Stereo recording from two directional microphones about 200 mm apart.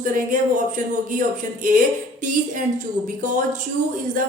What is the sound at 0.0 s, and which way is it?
Speech, 40° right (ahead or behind).